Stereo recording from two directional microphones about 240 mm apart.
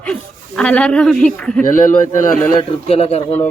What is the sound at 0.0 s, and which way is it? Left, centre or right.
Speech, centre.